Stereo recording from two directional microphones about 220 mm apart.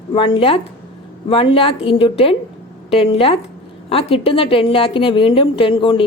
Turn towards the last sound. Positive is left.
turn(degrees=25)  # may be behind; listen again after turning